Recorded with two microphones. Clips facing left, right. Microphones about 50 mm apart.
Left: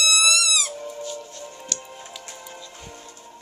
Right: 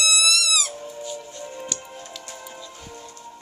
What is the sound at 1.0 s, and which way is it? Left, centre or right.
Music, centre.